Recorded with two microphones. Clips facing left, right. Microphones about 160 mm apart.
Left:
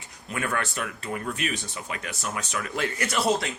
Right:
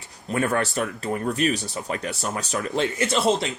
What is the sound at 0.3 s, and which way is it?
Speech, 35° right (ahead or behind).